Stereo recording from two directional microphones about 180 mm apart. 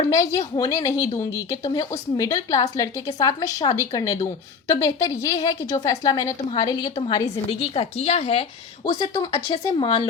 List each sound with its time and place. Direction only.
0.1 s a woman's voice: 15° left (ahead or behind)
7.6 s a woman's voice: 35° left (ahead or behind)